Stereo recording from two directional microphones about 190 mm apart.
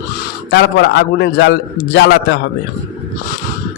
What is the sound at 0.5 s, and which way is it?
Speech, 65° left (ahead or behind).